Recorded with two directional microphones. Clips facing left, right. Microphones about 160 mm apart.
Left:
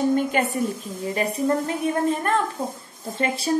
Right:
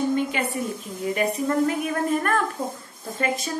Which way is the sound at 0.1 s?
45° left (ahead or behind).